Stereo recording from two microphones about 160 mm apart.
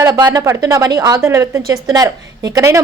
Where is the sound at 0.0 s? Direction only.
25° right (ahead or behind).